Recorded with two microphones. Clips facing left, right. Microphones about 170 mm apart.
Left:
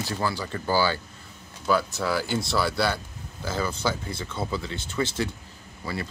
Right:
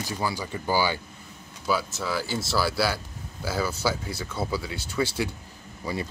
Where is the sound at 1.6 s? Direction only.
5° right (ahead or behind).